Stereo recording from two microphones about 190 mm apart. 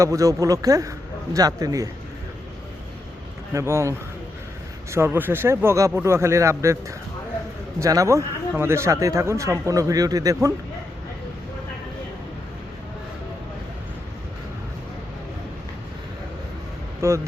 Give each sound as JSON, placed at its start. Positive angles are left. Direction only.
{"t": 0.0, "sound": "speech", "side_deg": -15}
{"t": 3.5, "sound": "speech", "side_deg": -15}
{"t": 17.0, "sound": "speech", "side_deg": -15}